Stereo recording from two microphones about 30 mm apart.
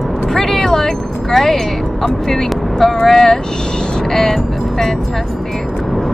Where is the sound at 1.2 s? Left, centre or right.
Centre.